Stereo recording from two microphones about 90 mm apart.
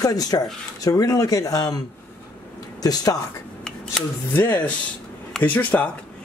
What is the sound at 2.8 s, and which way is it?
Speech, 45° left (ahead or behind).